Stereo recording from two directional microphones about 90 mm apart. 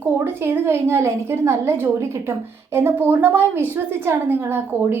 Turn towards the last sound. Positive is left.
turn(degrees=-25)  # may be behind; listen again after turning